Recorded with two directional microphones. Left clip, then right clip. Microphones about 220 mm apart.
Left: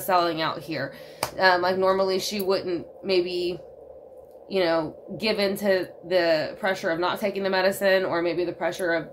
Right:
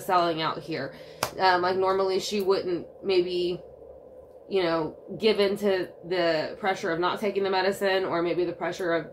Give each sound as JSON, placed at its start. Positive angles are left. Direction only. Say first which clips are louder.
{"t": 0.0, "sound": "a woman's voice", "louder": "left 2 dB", "side_deg": 40}